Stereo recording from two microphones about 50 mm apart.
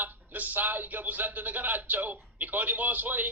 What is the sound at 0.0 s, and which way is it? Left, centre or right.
A man's voice, right.